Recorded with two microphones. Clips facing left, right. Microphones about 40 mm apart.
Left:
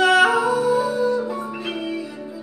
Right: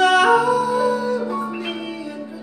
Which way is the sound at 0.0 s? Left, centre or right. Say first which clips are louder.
Right 1 dB; centre.